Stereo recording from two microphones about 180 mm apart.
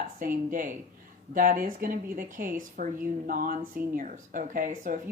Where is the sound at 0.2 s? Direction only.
50° right (ahead or behind).